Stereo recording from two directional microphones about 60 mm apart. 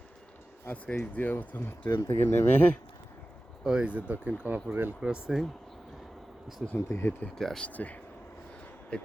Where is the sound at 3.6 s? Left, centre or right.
Centre.